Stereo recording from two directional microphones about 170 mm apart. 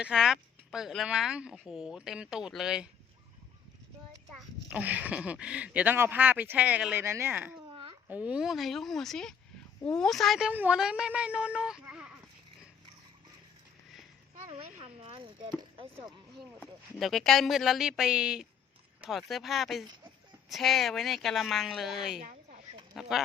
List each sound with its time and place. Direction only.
0.0 s speech: 5° right (ahead or behind)
4.7 s speech: 10° right (ahead or behind)
7.7 s babbling: 30° right (ahead or behind)
8.0 s speech: 5° right (ahead or behind)
14.7 s speech: 40° right (ahead or behind)
16.4 s speech: centre (ahead or behind)
22.2 s a sound: 50° right (ahead or behind)
23.0 s speech: centre (ahead or behind)